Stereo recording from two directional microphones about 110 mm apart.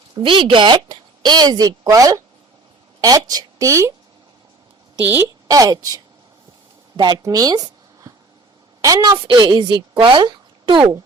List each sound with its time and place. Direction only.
0.1 s a woman's voice: 50° right (ahead or behind); by 3.9 s 30° right (ahead or behind)
4.9 s a woman's voice: 15° right (ahead or behind)
5.5 s a woman's voice: 30° right (ahead or behind)
7.2 s a sound: 35° right (ahead or behind)
8.8 s a woman's voice: 35° right (ahead or behind)
9.1 s speech: 45° right (ahead or behind)